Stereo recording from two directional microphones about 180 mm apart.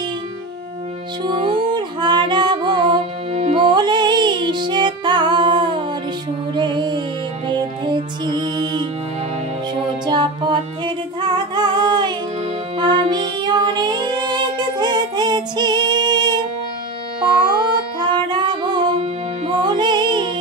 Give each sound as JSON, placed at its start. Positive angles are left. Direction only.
{"t": 1.2, "sound": "music", "side_deg": -25}
{"t": 10.0, "sound": "music", "side_deg": -25}
{"t": 18.1, "sound": "music", "side_deg": -25}